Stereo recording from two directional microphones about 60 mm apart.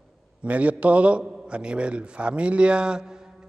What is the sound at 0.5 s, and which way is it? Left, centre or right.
A man's voice, right.